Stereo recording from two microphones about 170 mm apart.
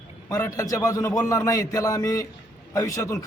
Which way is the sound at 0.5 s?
20° left (ahead or behind).